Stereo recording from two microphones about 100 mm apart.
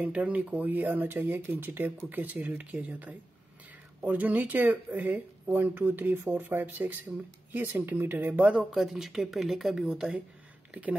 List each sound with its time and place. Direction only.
0.0 s speech: 15° right (ahead or behind)